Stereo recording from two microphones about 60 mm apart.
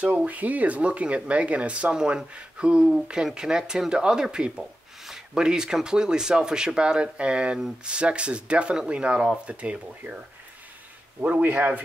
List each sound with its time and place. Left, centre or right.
0.0 s speech: right